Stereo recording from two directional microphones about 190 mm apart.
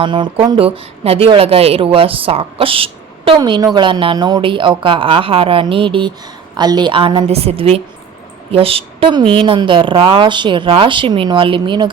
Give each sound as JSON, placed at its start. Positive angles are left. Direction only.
{"t": 0.0, "sound": "a woman's voice", "side_deg": -25}